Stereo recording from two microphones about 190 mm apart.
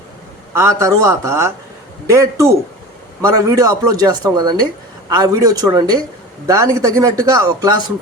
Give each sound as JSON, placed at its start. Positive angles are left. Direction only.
{"t": 0.5, "sound": "speech", "side_deg": -15}